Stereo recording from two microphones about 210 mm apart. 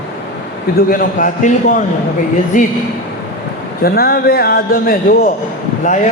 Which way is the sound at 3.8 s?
45° left (ahead or behind).